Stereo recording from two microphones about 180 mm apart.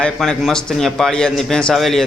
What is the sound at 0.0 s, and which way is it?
A man's voice, centre (ahead or behind).